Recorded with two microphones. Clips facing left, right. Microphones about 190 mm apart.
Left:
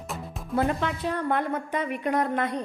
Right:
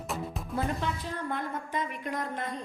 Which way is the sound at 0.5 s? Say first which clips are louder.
Left 6 dB; 70° left (ahead or behind).